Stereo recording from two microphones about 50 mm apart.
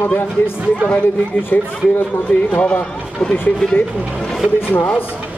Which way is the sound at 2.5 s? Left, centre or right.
Left.